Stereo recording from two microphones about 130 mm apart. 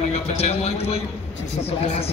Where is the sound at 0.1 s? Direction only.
55° left (ahead or behind).